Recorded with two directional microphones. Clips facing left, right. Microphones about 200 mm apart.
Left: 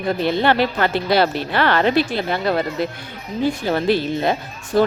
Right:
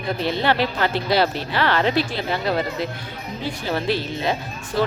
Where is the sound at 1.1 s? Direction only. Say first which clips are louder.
Left 3 dB; 55° left (ahead or behind).